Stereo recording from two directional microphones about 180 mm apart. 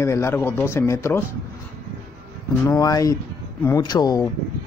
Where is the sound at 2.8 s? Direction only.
20° left (ahead or behind).